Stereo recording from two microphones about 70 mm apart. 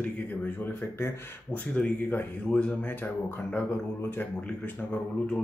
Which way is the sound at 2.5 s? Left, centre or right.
Centre.